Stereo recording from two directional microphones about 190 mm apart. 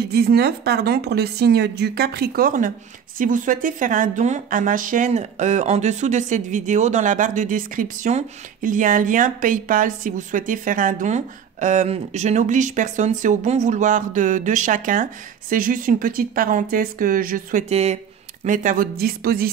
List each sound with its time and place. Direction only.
0.1 s a woman's voice: 55° right (ahead or behind)